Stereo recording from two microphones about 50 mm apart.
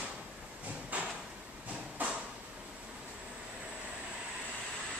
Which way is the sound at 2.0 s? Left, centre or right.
Right.